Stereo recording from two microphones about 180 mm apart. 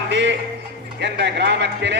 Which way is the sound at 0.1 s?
80° right.